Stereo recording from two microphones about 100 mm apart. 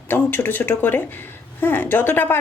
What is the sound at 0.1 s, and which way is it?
A woman's voice, 20° left (ahead or behind).